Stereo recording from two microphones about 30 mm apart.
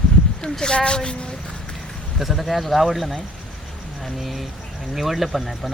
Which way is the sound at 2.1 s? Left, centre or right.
Centre.